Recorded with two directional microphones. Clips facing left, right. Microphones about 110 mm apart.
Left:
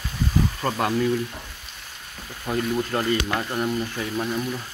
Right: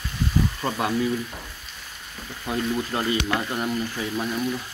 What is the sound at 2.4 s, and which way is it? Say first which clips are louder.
Speech: left 1 dB; 5° right (ahead or behind).